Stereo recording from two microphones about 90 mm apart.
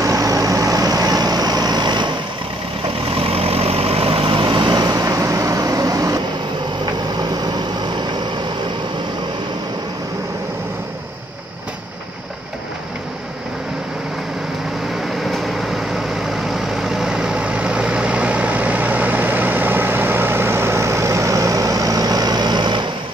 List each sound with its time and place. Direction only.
0.0 s vehicle: 40° right (ahead or behind); by 2.0 s 55° right (ahead or behind)
3.2 s vehicle: 90° right; by 6.2 s 40° right (ahead or behind)
6.9 s vehicle: 55° right (ahead or behind)
15.1 s vehicle: centre (ahead or behind); by 22.8 s 60° right (ahead or behind)